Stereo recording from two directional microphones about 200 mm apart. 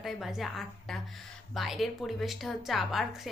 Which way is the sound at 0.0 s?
Centre (ahead or behind).